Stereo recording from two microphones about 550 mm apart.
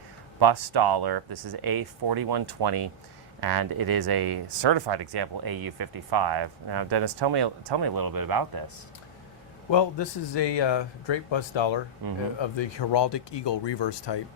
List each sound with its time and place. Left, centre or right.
0.3 s speech: right
9.6 s speech: left
12.0 s speech: right
12.4 s speech: left